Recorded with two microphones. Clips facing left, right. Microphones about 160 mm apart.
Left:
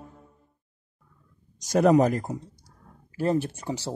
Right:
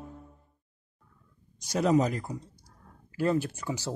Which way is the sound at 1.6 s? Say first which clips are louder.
Left 6 dB; 50° left (ahead or behind).